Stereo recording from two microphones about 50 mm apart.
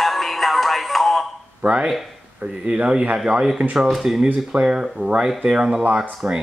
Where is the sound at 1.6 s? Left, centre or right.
Centre.